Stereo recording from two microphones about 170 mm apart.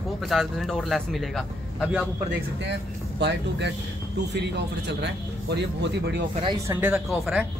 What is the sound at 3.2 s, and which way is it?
Speech, 85° right.